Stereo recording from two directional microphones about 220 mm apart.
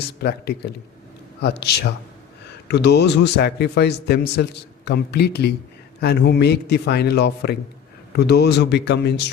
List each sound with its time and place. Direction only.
0.2 s a man's voice: 50° left (ahead or behind)